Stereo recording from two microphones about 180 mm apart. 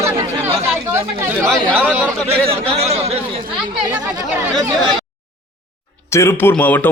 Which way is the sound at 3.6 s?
25° right (ahead or behind).